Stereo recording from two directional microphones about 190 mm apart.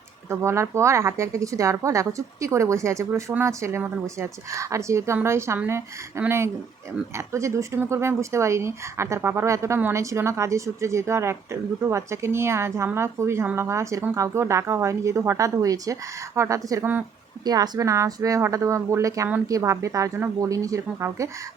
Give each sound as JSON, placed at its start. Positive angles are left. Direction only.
{"t": 0.3, "sound": "a woman's voice", "side_deg": -15}